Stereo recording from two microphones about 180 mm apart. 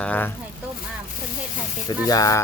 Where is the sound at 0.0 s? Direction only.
10° left (ahead or behind).